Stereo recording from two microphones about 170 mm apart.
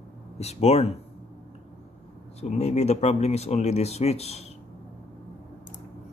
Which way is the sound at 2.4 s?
40° left (ahead or behind).